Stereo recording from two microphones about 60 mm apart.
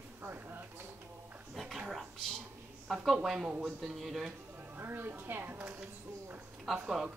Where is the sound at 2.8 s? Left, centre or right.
Centre.